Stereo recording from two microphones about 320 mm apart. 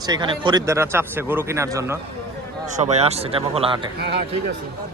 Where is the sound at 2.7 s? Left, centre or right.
Right.